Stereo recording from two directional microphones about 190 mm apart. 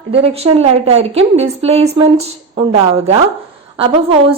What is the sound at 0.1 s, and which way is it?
A woman's voice, 30° right (ahead or behind).